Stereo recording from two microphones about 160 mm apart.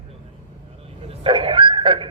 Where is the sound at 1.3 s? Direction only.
35° right (ahead or behind).